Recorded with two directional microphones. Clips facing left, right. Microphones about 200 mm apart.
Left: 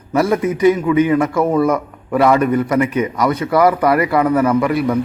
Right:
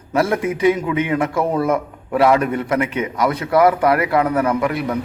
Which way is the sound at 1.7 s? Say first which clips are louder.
Left 2 dB; 5° right (ahead or behind).